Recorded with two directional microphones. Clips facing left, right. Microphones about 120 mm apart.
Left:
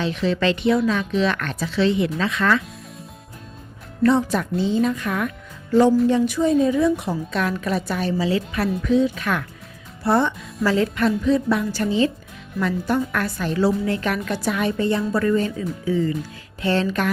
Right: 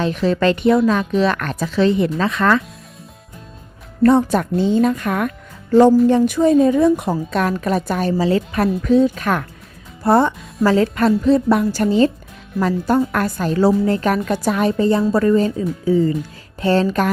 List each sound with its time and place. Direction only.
0.0 s a woman's voice: 45° right (ahead or behind)
4.0 s a woman's voice: 50° right (ahead or behind)